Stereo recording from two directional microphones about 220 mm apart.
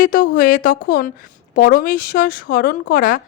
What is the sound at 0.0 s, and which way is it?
A woman's voice, 40° left (ahead or behind).